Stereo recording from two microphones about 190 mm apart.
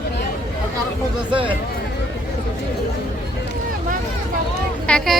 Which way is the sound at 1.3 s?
25° right (ahead or behind).